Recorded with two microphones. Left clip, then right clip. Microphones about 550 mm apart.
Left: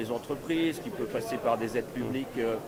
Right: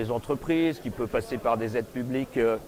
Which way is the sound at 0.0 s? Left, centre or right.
Right.